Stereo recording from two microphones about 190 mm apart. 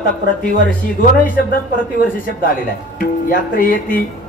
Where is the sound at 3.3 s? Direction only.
45° left (ahead or behind).